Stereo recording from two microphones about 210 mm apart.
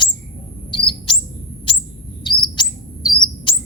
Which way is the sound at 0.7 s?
25° left (ahead or behind).